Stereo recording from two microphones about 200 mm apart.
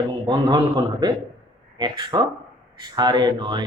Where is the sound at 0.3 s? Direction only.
20° right (ahead or behind).